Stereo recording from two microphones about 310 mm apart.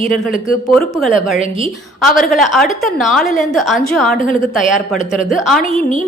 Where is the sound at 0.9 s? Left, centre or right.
Centre.